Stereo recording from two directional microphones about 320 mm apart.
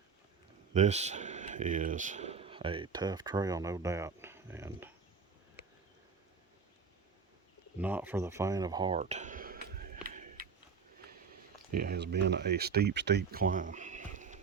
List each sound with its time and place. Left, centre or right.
0.7 s speech: right
7.8 s a sound: centre; by 10.4 s right
11.7 s speech: right